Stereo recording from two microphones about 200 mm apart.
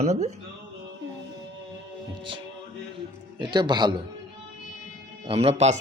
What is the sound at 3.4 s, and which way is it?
Speech, 20° right (ahead or behind).